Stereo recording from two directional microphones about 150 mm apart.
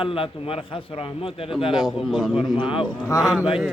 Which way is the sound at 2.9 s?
15° left (ahead or behind).